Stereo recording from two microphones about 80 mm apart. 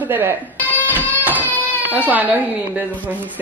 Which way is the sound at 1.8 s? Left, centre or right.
Right.